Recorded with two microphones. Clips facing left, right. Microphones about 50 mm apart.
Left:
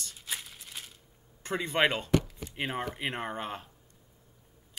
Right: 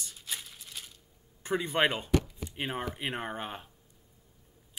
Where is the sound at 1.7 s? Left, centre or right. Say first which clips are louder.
Left 2 dB; centre.